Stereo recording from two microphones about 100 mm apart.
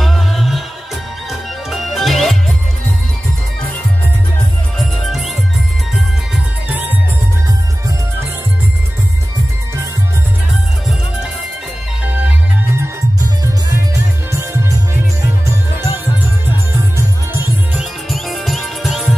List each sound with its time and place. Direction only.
0.0 s music: centre (ahead or behind)
1.7 s music: centre (ahead or behind)
6.7 s music: 15° right (ahead or behind)
14.3 s music: 25° right (ahead or behind)
17.7 s music: centre (ahead or behind)